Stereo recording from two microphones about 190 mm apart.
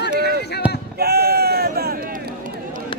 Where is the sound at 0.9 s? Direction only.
55° right (ahead or behind).